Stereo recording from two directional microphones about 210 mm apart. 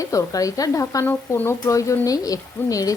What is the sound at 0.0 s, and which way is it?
Speech, 15° left (ahead or behind).